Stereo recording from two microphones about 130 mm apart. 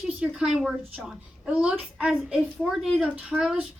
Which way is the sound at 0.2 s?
5° right (ahead or behind).